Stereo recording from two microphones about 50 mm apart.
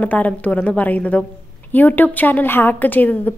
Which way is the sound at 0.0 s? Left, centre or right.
Left.